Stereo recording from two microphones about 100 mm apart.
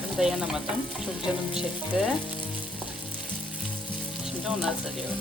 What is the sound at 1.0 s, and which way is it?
Frying, 10° right (ahead or behind).